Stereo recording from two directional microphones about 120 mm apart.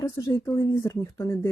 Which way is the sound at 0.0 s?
30° left (ahead or behind).